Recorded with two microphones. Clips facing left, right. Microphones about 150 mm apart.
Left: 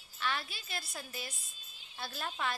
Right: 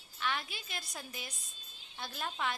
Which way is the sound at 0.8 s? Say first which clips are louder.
Left 1 dB; 5° left (ahead or behind).